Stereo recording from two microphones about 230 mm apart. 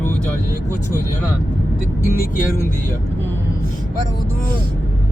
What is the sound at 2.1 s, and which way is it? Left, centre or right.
Speech, left.